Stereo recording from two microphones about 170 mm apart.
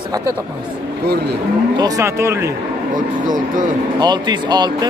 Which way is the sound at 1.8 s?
20° right (ahead or behind).